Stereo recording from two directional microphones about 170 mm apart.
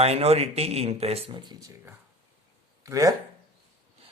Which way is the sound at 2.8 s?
20° right (ahead or behind).